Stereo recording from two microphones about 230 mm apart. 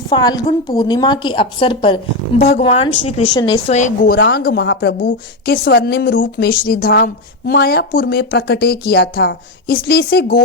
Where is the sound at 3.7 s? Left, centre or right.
Left.